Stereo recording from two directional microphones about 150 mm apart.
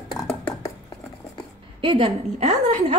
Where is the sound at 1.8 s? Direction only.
35° right (ahead or behind).